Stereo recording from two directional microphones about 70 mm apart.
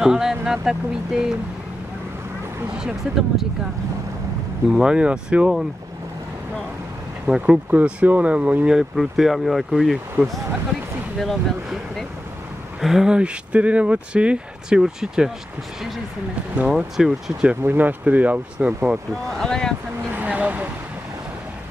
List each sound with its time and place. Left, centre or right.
0.0 s speech: centre
2.8 s speech: centre
4.6 s speech: centre
7.2 s speech: centre
8.7 s speech: centre
10.2 s speech: right
11.1 s speech: centre
12.8 s speech: centre
16.7 s speech: centre
17.6 s speech: right
19.4 s speech: centre
20.2 s speech: centre